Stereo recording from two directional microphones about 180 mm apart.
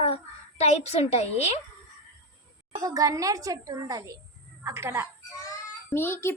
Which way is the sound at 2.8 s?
20° right (ahead or behind).